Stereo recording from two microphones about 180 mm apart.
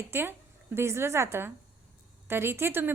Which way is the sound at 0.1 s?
15° right (ahead or behind).